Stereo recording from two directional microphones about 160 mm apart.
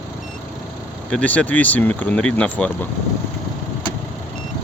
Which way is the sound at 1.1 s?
10° left (ahead or behind).